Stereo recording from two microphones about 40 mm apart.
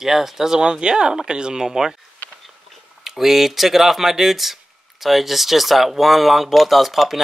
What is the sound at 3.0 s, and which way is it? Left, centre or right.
Speech, centre.